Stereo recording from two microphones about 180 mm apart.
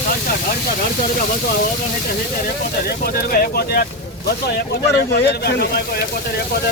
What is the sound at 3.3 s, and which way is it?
Speech, 55° left (ahead or behind).